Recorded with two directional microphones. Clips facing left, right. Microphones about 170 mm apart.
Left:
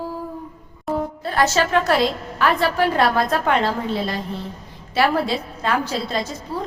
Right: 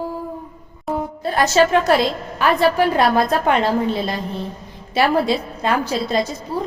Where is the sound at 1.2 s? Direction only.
15° right (ahead or behind).